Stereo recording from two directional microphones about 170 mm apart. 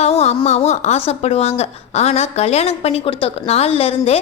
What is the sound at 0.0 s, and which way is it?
Speech, 40° left (ahead or behind).